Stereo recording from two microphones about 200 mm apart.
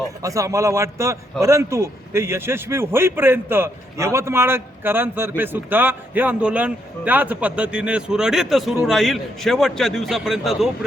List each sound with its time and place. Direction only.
0.2 s a man's voice: 15° right (ahead or behind)